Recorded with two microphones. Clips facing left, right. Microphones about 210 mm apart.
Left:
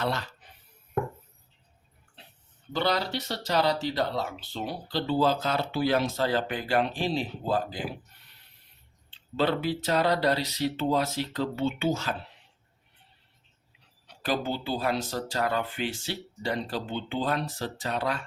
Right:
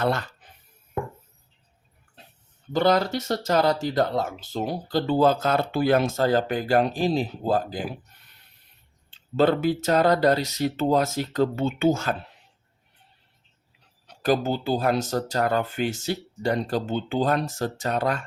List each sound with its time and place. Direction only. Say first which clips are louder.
0.0 s speech: right 5 dB; 50° right (ahead or behind)
2.7 s speech: right 7 dB; 50° right (ahead or behind)
9.0 s speech: right 6 dB; 45° right (ahead or behind)
14.1 s speech: right 6 dB; 45° right (ahead or behind)